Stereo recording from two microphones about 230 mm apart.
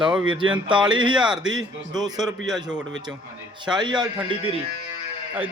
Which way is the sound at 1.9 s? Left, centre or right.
Centre.